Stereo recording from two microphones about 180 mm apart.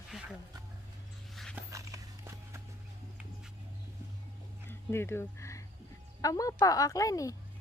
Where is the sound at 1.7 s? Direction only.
15° right (ahead or behind).